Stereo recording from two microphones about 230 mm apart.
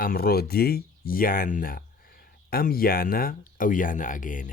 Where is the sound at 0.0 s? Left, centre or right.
Left.